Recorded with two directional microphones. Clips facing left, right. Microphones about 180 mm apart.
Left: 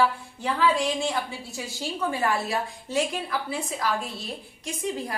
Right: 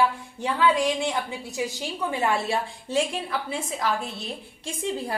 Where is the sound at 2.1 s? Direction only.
25° right (ahead or behind).